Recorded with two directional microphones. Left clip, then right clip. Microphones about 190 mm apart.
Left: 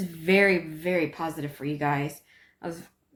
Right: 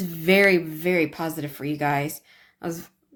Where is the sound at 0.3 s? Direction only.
55° right (ahead or behind).